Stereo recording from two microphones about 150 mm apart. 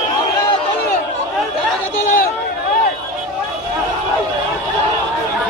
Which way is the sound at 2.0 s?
65° left (ahead or behind).